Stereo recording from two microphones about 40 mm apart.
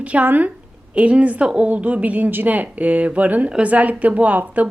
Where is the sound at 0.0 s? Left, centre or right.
Right.